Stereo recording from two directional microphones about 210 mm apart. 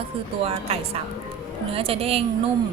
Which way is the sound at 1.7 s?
25° right (ahead or behind).